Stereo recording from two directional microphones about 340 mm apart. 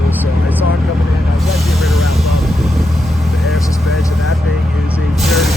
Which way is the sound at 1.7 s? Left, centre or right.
Centre.